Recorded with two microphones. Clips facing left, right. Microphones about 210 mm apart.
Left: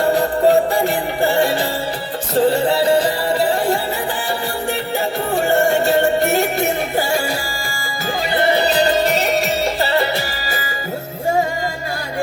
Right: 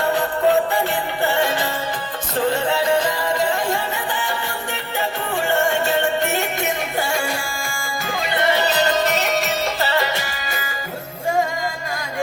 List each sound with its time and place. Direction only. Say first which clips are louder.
0.0 s music: left 4 dB; 35° left (ahead or behind)
8.3 s music: left 3 dB; 35° left (ahead or behind)